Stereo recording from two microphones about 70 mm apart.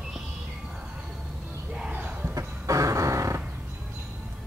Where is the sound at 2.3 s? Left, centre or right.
Right.